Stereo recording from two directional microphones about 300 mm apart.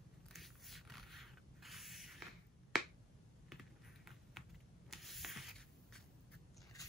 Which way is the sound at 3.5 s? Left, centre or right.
Centre.